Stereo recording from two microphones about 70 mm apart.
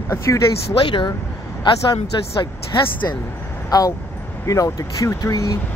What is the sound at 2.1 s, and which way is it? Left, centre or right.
Speech, left.